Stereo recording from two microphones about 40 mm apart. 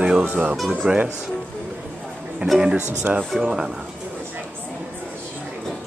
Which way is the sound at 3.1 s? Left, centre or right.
Right.